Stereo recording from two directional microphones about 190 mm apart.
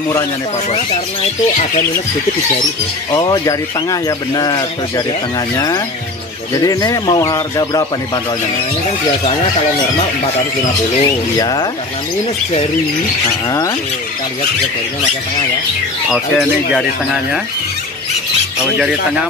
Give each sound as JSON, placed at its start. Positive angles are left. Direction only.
{"t": 3.1, "sound": "speech", "side_deg": 20}
{"t": 6.6, "sound": "speech", "side_deg": 20}
{"t": 11.0, "sound": "speech", "side_deg": 20}
{"t": 13.5, "sound": "squawk", "side_deg": 15}
{"t": 16.1, "sound": "speech", "side_deg": 0}